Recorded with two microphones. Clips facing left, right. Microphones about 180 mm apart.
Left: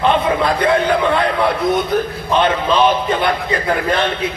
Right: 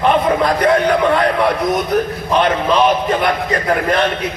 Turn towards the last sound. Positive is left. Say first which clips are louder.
# right 1 dB
turn(degrees=30)  # may be behind; listen again after turning